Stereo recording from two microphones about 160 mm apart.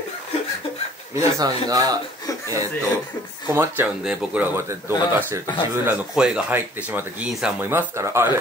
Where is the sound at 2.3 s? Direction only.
20° left (ahead or behind).